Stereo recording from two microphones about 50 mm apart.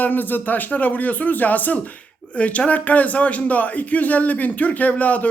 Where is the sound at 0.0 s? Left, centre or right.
Left.